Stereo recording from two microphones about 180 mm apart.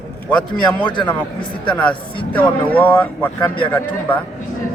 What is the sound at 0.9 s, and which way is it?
Speech, 25° left (ahead or behind).